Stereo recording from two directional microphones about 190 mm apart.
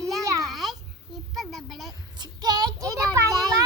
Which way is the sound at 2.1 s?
20° right (ahead or behind).